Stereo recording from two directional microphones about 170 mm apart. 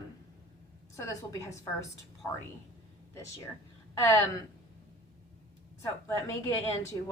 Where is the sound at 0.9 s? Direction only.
15° left (ahead or behind).